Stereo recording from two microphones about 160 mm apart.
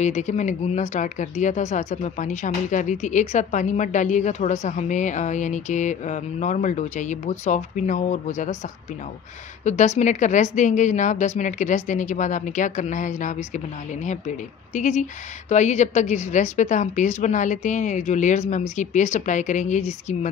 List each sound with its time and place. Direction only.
0.0 s speech: 50° left (ahead or behind)
9.7 s speech: 45° left (ahead or behind)